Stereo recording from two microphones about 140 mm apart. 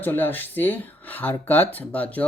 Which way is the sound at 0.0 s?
15° left (ahead or behind).